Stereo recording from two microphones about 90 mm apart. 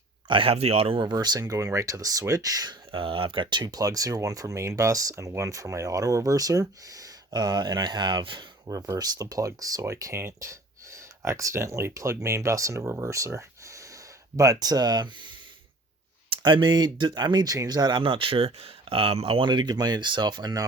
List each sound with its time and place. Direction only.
0.3 s speech: 80° right
1.1 s speech: 50° right (ahead or behind)
1.4 s speech: 35° right (ahead or behind)
2.9 s speech: 80° right; by 8.7 s 65° right (ahead or behind)
8.7 s speech: 45° right (ahead or behind)
16.3 s speech: 65° right (ahead or behind)
18.0 s speech: 75° right (ahead or behind); by 20.7 s 45° right (ahead or behind)